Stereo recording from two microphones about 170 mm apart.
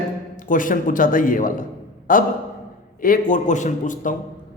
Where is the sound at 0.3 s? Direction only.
50° left (ahead or behind).